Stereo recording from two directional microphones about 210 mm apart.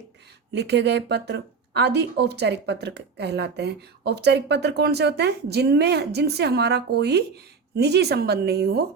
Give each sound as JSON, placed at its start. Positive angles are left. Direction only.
{"t": 0.5, "sound": "speech", "side_deg": -55}